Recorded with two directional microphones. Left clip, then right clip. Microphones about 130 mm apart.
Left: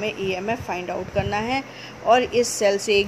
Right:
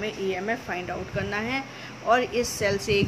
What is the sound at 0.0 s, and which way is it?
Speech, 40° left (ahead or behind).